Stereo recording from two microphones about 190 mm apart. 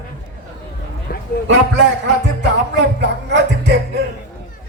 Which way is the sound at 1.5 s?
70° right (ahead or behind).